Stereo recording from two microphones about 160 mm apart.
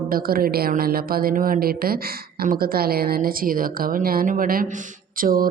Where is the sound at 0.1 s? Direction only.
65° right (ahead or behind).